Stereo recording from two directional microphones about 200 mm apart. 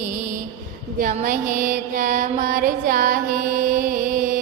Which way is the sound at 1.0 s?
45° right (ahead or behind).